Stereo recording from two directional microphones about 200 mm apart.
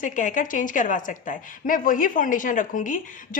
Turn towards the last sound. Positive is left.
turn(degrees=40)  # may be behind; listen again after turning